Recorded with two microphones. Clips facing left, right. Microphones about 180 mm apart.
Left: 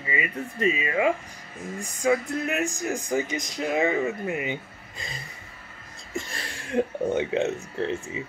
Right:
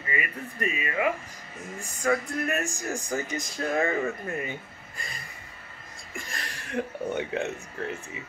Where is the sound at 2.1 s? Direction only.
20° left (ahead or behind).